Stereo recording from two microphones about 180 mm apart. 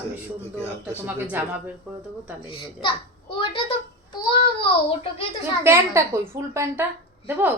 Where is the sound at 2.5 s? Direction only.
30° left (ahead or behind).